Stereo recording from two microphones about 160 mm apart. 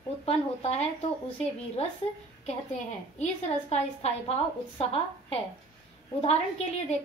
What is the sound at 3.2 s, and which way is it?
A woman's voice, 40° left (ahead or behind).